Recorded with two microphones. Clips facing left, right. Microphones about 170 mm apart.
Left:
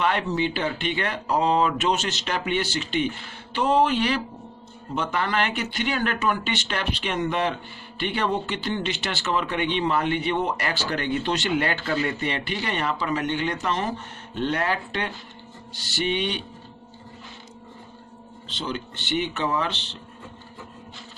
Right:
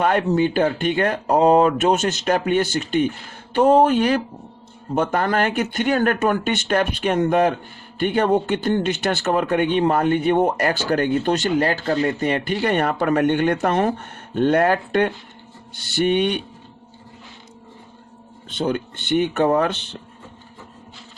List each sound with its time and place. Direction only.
0.0 s speech: 45° right (ahead or behind)
18.4 s speech: 50° right (ahead or behind)